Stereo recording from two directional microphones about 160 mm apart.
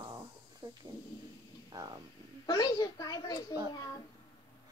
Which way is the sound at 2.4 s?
25° left (ahead or behind).